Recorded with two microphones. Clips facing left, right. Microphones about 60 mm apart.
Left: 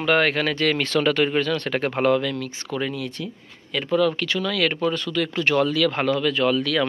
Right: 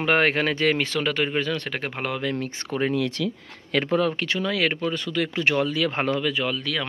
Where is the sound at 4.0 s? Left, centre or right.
Right.